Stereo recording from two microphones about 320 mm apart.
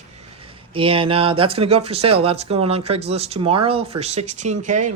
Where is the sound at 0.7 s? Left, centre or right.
Centre.